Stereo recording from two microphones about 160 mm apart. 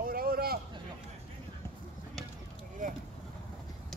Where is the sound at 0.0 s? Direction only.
65° right (ahead or behind).